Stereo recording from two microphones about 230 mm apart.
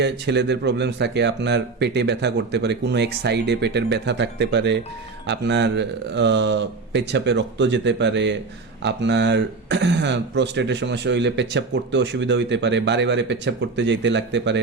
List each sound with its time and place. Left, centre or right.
0.0 s speech: right